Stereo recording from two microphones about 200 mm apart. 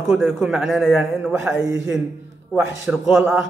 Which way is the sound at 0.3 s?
Centre (ahead or behind).